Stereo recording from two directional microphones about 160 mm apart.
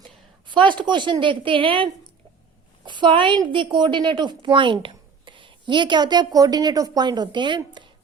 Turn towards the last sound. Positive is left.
turn(degrees=-30)  # may be behind; listen again after turning